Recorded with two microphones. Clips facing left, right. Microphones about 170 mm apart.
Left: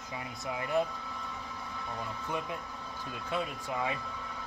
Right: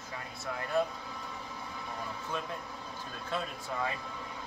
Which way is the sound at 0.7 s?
15° left (ahead or behind).